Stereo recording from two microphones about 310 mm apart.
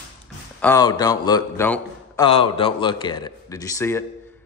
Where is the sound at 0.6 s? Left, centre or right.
Centre.